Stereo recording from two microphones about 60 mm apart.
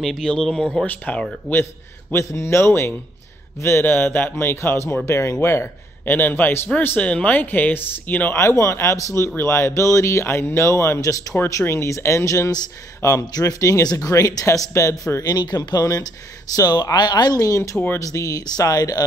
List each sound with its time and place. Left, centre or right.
0.0 s speech: centre
0.8 s speech: left
1.5 s speech: centre
2.1 s a man's voice: left
3.8 s a man's voice: left
7.0 s speech: left
8.4 s a man's voice: left
10.2 s a man's voice: left
11.0 s speech: left
11.6 s speech: left
13.0 s speech: left
14.7 s a man's voice: left
15.7 s speech: left